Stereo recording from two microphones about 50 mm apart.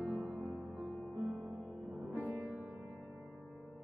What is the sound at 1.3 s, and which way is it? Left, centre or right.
Music, centre.